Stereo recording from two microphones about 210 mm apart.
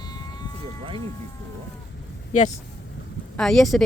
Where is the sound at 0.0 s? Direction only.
20° left (ahead or behind).